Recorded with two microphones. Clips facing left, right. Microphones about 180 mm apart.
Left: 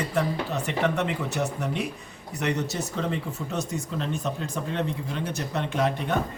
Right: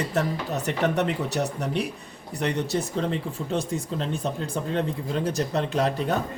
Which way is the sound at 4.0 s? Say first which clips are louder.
Right 1 dB; 35° right (ahead or behind).